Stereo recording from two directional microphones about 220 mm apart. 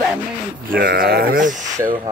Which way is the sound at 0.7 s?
40° right (ahead or behind).